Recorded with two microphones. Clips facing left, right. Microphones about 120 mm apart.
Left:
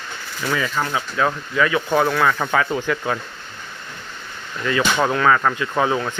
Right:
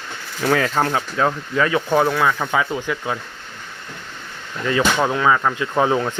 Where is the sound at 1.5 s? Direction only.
30° right (ahead or behind).